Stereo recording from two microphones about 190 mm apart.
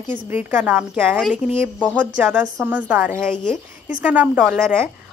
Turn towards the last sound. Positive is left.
turn(degrees=0)  # may be behind; listen again after turning